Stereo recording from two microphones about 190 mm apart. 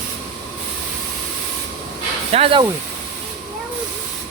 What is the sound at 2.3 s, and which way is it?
Speech, 30° right (ahead or behind).